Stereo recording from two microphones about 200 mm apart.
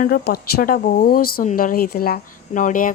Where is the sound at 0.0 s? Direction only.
50° left (ahead or behind).